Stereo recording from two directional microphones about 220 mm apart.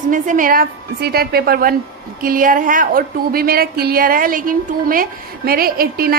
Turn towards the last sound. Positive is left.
turn(degrees=-45)  # may be behind; listen again after turning